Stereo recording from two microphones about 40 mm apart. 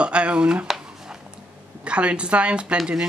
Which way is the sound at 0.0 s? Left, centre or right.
Right.